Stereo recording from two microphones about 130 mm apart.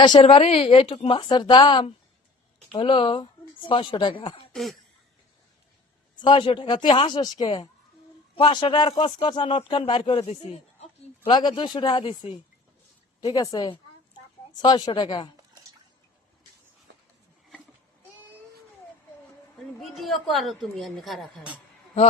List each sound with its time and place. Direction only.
0.0 s speech: 40° left (ahead or behind)
4.5 s a woman's voice: centre (ahead or behind)
6.2 s speech: 40° left (ahead or behind); by 10.8 s 55° left (ahead or behind)
11.3 s speech: 35° left (ahead or behind)
13.2 s speech: 30° left (ahead or behind)
19.5 s a woman's voice: centre (ahead or behind)